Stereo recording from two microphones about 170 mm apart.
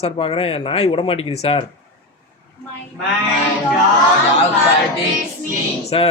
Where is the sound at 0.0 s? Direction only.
35° left (ahead or behind).